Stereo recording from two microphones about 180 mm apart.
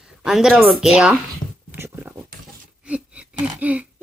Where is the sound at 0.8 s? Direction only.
5° right (ahead or behind).